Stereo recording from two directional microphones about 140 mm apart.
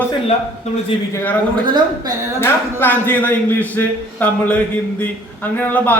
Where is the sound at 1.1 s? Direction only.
15° left (ahead or behind).